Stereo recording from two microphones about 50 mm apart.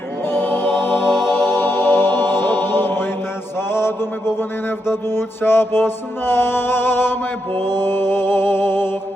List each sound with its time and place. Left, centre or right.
0.3 s choir: left
1.3 s chant: left
3.7 s mantra: left
4.9 s music: left